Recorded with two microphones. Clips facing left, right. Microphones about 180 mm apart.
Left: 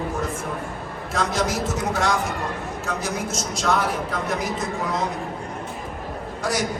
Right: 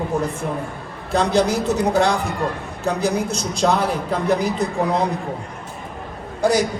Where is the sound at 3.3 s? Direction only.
35° right (ahead or behind).